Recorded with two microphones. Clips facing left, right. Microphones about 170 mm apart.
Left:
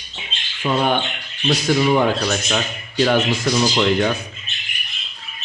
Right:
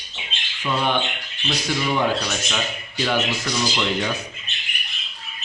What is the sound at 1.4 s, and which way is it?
Speech, 50° left (ahead or behind).